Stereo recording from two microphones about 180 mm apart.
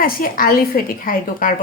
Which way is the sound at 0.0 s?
50° left (ahead or behind).